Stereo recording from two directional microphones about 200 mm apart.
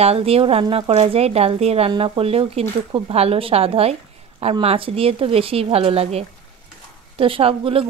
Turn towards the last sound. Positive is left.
turn(degrees=-25)  # may be behind; listen again after turning